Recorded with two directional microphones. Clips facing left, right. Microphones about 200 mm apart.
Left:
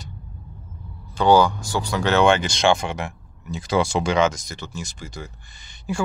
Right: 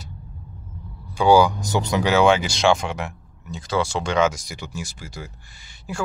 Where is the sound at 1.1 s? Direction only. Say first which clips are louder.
Right 1 dB; 10° right (ahead or behind).